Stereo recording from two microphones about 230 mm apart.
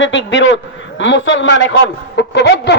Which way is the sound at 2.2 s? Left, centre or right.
Left.